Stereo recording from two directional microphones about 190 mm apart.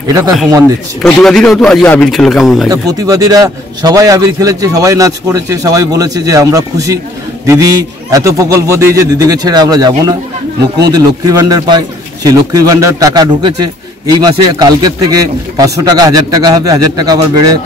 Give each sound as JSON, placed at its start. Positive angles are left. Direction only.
{"t": 1.0, "sound": "speech", "side_deg": 0}
{"t": 2.7, "sound": "a man's voice", "side_deg": -20}